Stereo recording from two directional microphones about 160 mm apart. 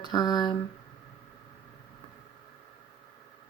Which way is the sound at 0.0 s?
25° left (ahead or behind).